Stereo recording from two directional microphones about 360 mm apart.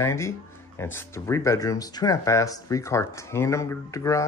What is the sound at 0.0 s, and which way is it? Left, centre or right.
Speech, centre.